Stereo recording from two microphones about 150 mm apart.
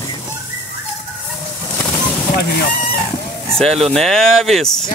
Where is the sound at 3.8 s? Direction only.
Centre (ahead or behind).